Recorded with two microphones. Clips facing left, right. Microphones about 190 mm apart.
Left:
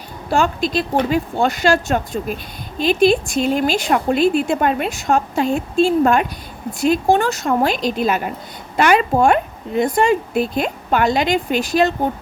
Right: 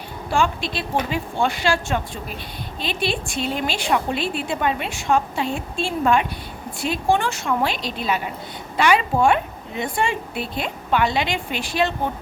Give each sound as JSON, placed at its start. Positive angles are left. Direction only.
{"t": 0.3, "sound": "a woman's voice", "side_deg": 40}